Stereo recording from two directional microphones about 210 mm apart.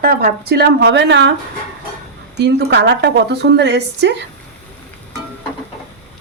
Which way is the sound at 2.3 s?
55° right (ahead or behind).